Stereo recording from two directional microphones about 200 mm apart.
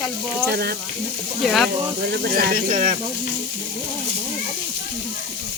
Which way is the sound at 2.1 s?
45° right (ahead or behind).